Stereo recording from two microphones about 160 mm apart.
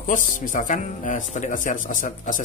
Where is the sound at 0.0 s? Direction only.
55° left (ahead or behind).